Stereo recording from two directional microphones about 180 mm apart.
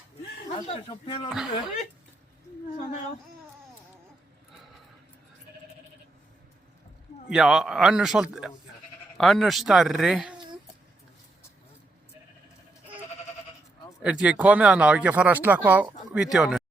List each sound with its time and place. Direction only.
0.7 s speech: 30° left (ahead or behind)
7.3 s speech: 5° right (ahead or behind)
14.0 s speech: 5° right (ahead or behind)